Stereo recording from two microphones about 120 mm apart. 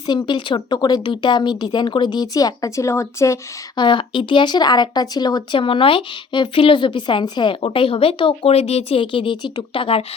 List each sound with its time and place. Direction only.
0.1 s speech: 40° left (ahead or behind); by 3.3 s 25° left (ahead or behind)
3.8 s speech: 45° left (ahead or behind)